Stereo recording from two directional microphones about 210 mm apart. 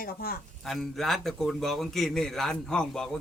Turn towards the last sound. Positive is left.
turn(degrees=5)  # may be behind; listen again after turning